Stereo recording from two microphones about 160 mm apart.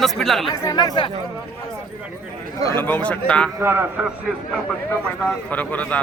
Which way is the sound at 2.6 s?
15° left (ahead or behind).